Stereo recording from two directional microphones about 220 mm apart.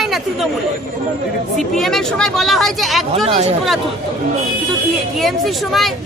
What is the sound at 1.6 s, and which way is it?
Speech, centre (ahead or behind).